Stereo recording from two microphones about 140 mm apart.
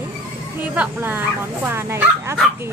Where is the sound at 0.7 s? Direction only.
15° right (ahead or behind).